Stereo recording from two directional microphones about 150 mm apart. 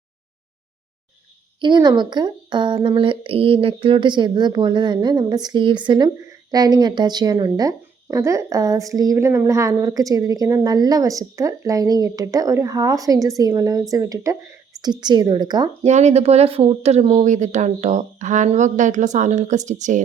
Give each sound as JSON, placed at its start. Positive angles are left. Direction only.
{"t": 1.6, "sound": "speech", "side_deg": -30}
{"t": 15.8, "sound": "speech", "side_deg": -50}